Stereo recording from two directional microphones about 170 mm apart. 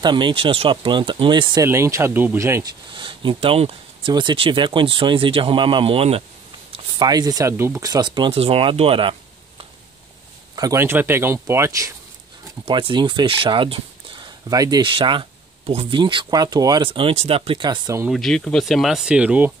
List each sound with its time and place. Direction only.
0.0 s speech: 25° right (ahead or behind)
2.9 s speech: 30° right (ahead or behind)
10.5 s speech: 20° right (ahead or behind)
12.6 s speech: 30° right (ahead or behind)
18.1 s speech: centre (ahead or behind)